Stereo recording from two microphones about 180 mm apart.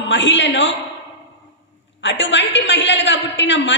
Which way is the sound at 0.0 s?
90° left.